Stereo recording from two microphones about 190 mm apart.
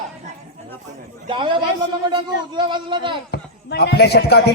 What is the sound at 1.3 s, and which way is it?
Speech, 25° right (ahead or behind).